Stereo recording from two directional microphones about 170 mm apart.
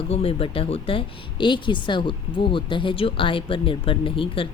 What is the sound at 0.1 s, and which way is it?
Speech, 35° left (ahead or behind).